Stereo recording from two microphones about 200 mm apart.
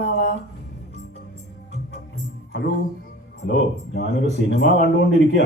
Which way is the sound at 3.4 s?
60° left (ahead or behind).